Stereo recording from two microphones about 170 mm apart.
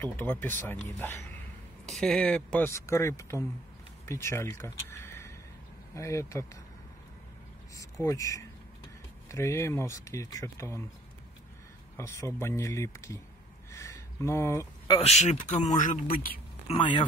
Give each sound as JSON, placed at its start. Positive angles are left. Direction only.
{"t": 0.0, "sound": "speech", "side_deg": 10}
{"t": 1.9, "sound": "speech", "side_deg": 0}
{"t": 2.7, "sound": "speech", "side_deg": 15}
{"t": 7.7, "sound": "speech", "side_deg": 20}
{"t": 12.0, "sound": "speech", "side_deg": 15}
{"t": 13.7, "sound": "a sound", "side_deg": 15}
{"t": 15.0, "sound": "speech", "side_deg": 40}
{"t": 16.6, "sound": "speech", "side_deg": 30}